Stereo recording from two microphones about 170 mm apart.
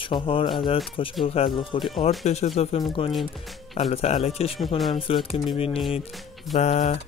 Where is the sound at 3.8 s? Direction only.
35° left (ahead or behind).